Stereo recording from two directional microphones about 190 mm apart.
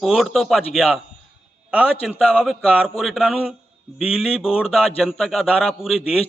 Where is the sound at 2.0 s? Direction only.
Centre (ahead or behind).